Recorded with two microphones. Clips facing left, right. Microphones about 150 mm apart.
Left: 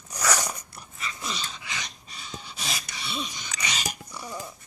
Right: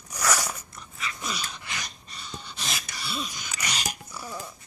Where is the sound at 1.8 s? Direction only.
Centre (ahead or behind).